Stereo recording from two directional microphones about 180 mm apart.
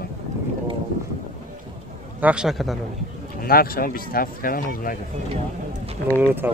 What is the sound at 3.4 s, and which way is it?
Speech, 55° left (ahead or behind).